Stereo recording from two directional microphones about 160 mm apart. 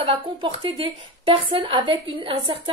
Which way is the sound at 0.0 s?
35° right (ahead or behind).